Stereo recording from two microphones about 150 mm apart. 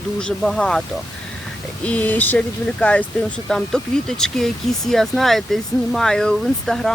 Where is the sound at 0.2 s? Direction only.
5° left (ahead or behind).